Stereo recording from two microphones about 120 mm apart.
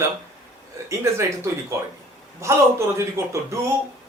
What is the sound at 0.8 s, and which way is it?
Speech, 25° right (ahead or behind).